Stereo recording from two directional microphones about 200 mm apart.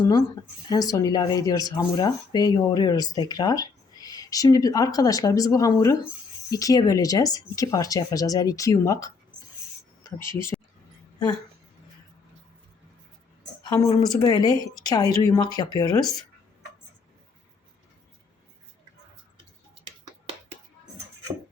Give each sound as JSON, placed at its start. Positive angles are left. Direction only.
{"t": 0.0, "sound": "a woman's voice", "side_deg": 20}
{"t": 13.7, "sound": "a woman's voice", "side_deg": 20}